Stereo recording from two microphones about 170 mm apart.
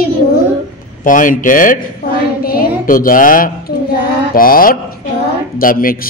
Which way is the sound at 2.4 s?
60° left (ahead or behind).